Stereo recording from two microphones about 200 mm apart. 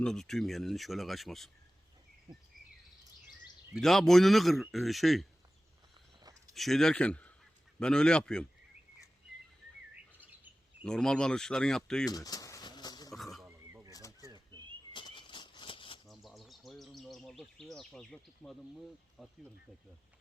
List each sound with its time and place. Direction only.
0.0 s speech: centre (ahead or behind)
3.8 s speech: centre (ahead or behind)
6.5 s a man's voice: centre (ahead or behind)
9.9 s bird vocalization: 10° right (ahead or behind)
10.8 s speech: 5° left (ahead or behind)
12.0 s pigeon: 20° left (ahead or behind)
13.1 s neigh: centre (ahead or behind)
13.4 s neigh: 15° right (ahead or behind)
13.9 s bird: 15° left (ahead or behind)
14.3 s a sound: 20° right (ahead or behind)
14.9 s a sound: 25° left (ahead or behind)
16.0 s bird: centre (ahead or behind)
19.2 s speech: centre (ahead or behind)